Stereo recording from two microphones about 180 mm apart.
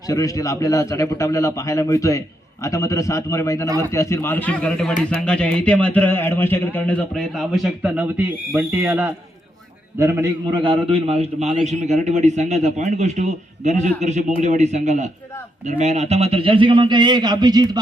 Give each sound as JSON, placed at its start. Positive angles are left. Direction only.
{"t": 0.1, "sound": "a man's voice", "side_deg": 20}
{"t": 3.7, "sound": "a man's voice", "side_deg": -20}
{"t": 3.9, "sound": "a man's voice", "side_deg": 15}
{"t": 10.5, "sound": "a man's voice", "side_deg": -30}